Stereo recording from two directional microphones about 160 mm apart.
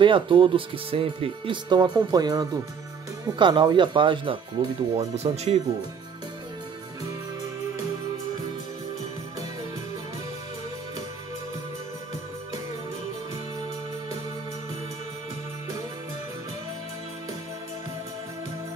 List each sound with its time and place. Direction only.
0.0 s speech: 30° right (ahead or behind)